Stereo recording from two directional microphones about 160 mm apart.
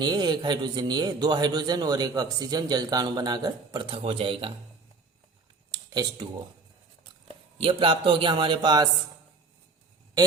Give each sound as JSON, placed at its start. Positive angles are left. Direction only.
{"t": 0.0, "sound": "a man's voice", "side_deg": -25}
{"t": 5.7, "sound": "a sound", "side_deg": -25}
{"t": 7.3, "sound": "a man's voice", "side_deg": -35}